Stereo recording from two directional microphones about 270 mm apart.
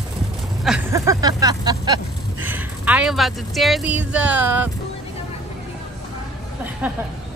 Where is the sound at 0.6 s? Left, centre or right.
Centre.